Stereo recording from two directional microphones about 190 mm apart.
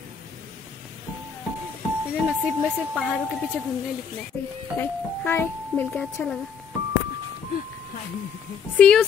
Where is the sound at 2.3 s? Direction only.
5° right (ahead or behind).